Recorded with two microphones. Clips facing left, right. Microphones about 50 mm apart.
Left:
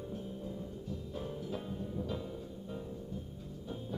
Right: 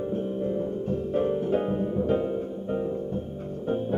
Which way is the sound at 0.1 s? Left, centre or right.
Right.